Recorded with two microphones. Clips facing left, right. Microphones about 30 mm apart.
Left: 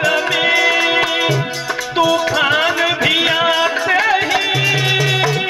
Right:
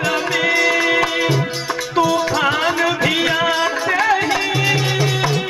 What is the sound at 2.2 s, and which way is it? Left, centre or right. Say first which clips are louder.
Music: left 3 dB; centre.